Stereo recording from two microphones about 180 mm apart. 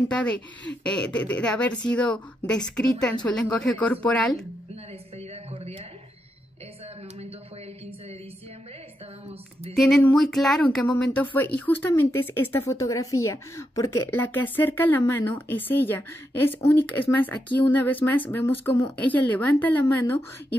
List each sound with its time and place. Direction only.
0.1 s a woman's voice: 5° left (ahead or behind)
5.1 s a sound: 35° right (ahead or behind)
9.8 s speech: centre (ahead or behind)